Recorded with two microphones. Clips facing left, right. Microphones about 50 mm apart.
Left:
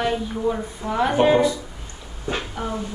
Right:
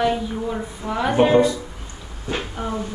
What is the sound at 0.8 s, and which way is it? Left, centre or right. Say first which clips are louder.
Speech: even; centre.